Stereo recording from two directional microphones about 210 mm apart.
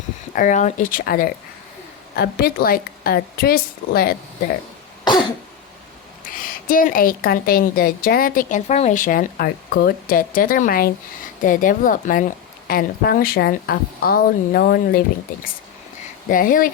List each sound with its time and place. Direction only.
0.3 s a woman's voice: 35° left (ahead or behind)
6.2 s a woman's voice: 40° left (ahead or behind)
16.3 s a woman's voice: 40° left (ahead or behind)